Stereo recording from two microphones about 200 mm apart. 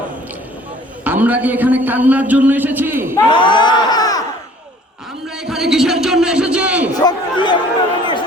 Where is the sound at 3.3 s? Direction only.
25° left (ahead or behind).